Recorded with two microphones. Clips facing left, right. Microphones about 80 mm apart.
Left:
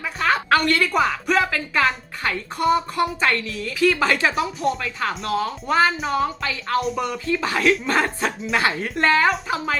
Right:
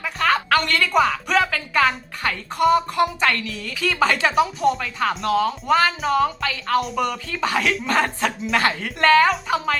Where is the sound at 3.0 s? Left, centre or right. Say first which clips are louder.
Right 1 dB; left.